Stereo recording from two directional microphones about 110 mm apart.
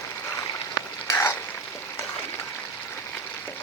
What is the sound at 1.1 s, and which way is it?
Frying, 20° left (ahead or behind).